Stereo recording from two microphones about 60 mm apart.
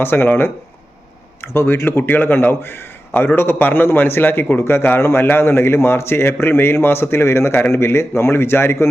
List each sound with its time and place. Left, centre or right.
0.0 s a man's voice: left